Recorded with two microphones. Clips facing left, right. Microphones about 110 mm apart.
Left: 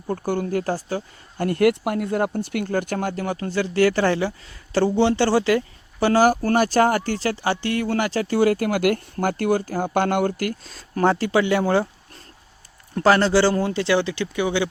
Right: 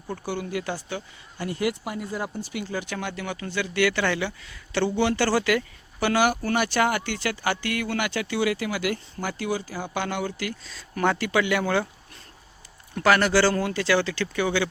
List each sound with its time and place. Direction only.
0.1 s speech: 45° left (ahead or behind)
1.5 s speech: 60° left (ahead or behind); by 11.9 s 30° left (ahead or behind)
12.9 s speech: 30° left (ahead or behind)